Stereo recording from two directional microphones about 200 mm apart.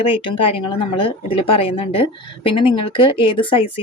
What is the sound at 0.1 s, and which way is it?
Speech, 25° left (ahead or behind).